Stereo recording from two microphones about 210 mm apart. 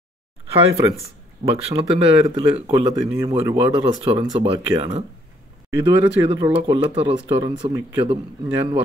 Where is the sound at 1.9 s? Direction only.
25° right (ahead or behind).